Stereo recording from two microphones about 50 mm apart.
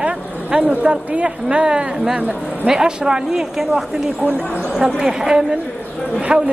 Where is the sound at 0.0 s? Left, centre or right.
Centre.